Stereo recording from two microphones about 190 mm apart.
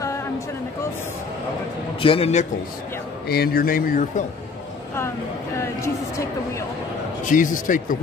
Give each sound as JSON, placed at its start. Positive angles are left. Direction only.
{"t": 2.0, "sound": "a man's voice", "side_deg": 30}
{"t": 3.3, "sound": "a man's voice", "side_deg": 55}
{"t": 5.6, "sound": "a woman's voice", "side_deg": 15}
{"t": 7.2, "sound": "a man's voice", "side_deg": 45}